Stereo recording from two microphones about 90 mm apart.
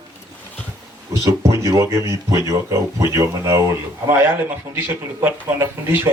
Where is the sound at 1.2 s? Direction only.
35° right (ahead or behind).